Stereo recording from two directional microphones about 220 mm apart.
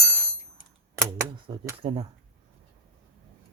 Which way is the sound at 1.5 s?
25° right (ahead or behind).